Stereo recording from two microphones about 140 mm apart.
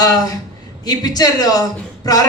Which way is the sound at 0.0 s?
25° left (ahead or behind).